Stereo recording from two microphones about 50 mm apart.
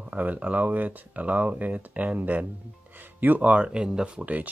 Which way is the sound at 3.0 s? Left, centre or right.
Right.